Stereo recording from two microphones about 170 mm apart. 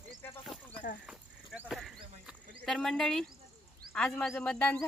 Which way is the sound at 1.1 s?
5° right (ahead or behind).